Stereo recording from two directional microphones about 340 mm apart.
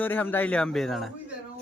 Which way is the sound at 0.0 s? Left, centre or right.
Centre.